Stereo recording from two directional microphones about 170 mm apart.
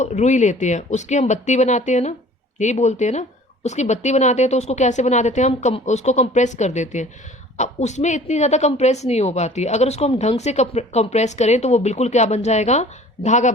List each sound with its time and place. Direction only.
0.0 s a woman's voice: 45° left (ahead or behind)